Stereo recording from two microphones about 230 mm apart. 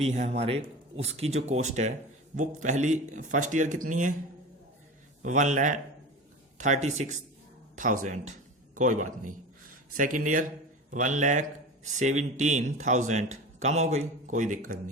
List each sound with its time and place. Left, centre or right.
0.0 s a man's voice: right
5.2 s a man's voice: right